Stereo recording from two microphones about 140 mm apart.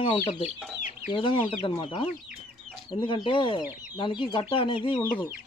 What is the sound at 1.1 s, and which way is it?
Speech, 35° left (ahead or behind).